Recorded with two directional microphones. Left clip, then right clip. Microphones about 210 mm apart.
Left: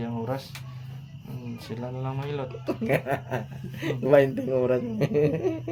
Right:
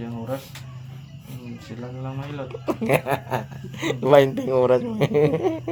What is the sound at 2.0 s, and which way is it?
Speech, 45° left (ahead or behind).